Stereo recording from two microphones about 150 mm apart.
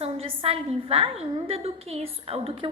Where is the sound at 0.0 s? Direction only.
40° right (ahead or behind).